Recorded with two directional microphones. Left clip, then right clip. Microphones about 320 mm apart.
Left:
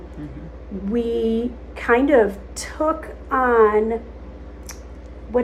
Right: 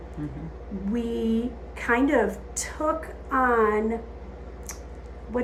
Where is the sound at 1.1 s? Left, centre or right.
Left.